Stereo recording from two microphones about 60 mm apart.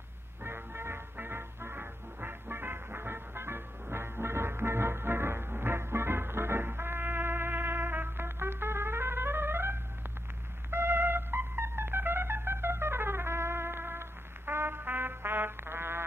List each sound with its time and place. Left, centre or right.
0.4 s music: right